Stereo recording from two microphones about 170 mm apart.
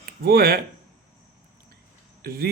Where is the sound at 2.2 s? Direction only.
65° right (ahead or behind).